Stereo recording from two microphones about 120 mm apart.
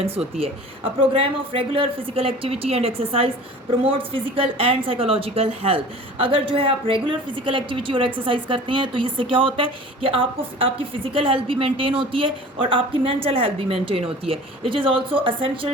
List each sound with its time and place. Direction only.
0.2 s a woman's voice: 55° right (ahead or behind)